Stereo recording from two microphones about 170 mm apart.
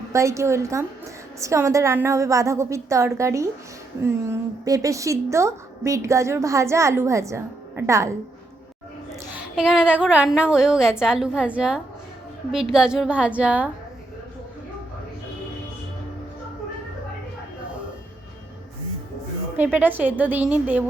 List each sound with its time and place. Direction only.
0.1 s a woman's voice: 15° right (ahead or behind)
9.3 s a woman's voice: 5° right (ahead or behind)
19.5 s a woman's voice: 10° right (ahead or behind)